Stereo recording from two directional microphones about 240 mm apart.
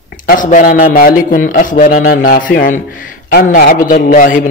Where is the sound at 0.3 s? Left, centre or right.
Left.